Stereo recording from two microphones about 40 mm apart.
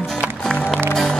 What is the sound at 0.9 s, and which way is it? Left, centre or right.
Music, centre.